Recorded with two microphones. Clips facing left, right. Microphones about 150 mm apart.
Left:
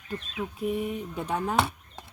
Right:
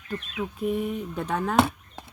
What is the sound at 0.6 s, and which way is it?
Speech, 45° right (ahead or behind).